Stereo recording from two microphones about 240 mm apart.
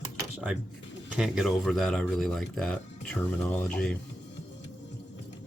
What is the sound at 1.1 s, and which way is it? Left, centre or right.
Speech, centre.